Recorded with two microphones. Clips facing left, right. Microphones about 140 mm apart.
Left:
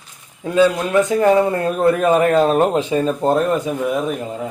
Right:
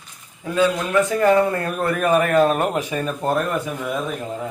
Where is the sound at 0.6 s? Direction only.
20° left (ahead or behind).